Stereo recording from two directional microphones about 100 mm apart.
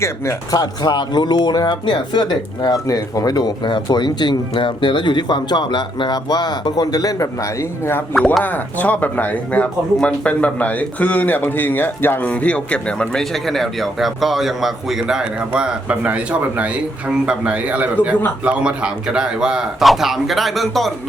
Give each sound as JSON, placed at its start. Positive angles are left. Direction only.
{"t": 0.5, "sound": "speech", "side_deg": 40}
{"t": 8.4, "sound": "a man's voice", "side_deg": 15}